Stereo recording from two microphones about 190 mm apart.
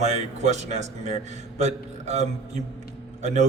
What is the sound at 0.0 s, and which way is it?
Speech, 35° right (ahead or behind).